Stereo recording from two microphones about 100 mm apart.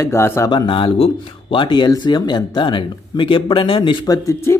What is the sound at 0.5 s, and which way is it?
Speech, 55° left (ahead or behind).